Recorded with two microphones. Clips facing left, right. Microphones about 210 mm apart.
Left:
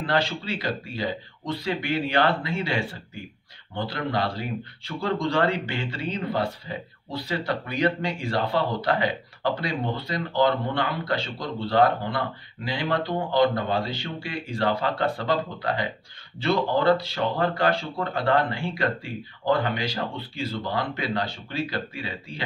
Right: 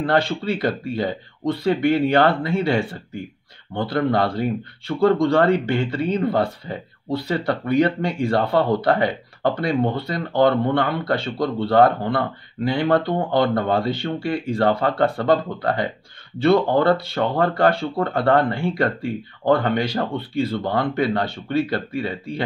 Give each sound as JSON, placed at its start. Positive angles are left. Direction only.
{"t": 0.0, "sound": "speech", "side_deg": -55}